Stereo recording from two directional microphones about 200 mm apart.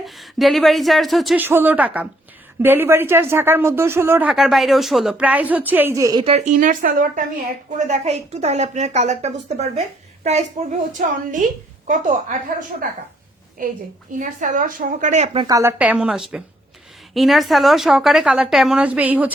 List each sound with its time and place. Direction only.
0.0 s a woman's voice: centre (ahead or behind); by 6.2 s 15° right (ahead or behind)
6.2 s a woman's voice: 35° right (ahead or behind)
14.1 s a woman's voice: 40° right (ahead or behind)
15.4 s a woman's voice: 15° right (ahead or behind)